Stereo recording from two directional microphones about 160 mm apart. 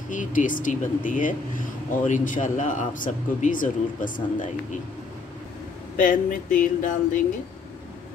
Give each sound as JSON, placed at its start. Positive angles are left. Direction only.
{"t": 0.1, "sound": "speech", "side_deg": 55}
{"t": 5.9, "sound": "speech", "side_deg": 55}